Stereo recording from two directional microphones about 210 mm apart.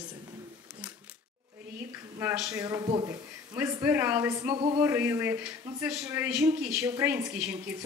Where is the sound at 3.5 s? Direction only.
10° right (ahead or behind).